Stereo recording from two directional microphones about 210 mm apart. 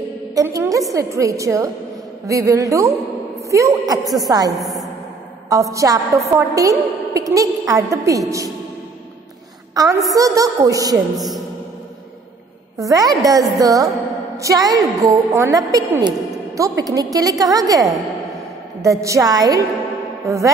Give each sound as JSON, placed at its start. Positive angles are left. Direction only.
{"t": 0.3, "sound": "a woman's voice", "side_deg": -15}
{"t": 4.6, "sound": "a woman's voice", "side_deg": 0}
{"t": 5.5, "sound": "a woman's voice", "side_deg": -15}
{"t": 9.8, "sound": "a woman's voice", "side_deg": -15}
{"t": 11.1, "sound": "a sound", "side_deg": 0}
{"t": 12.7, "sound": "a woman's voice", "side_deg": -15}